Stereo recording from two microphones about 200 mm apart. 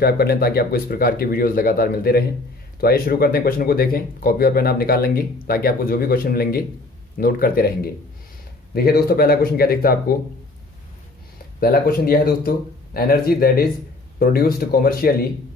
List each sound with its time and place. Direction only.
0.0 s speech: 50° left (ahead or behind)
11.6 s speech: 50° left (ahead or behind)